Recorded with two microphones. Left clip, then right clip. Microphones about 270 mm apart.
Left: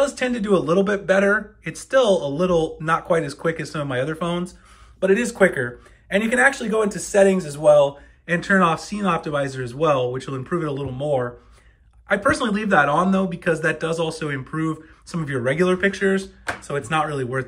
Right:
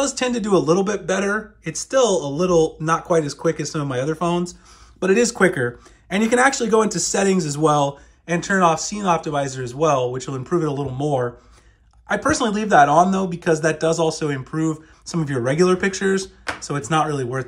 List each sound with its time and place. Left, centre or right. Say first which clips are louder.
0.0 s speech: even; centre
8.3 s speech: right 1 dB; centre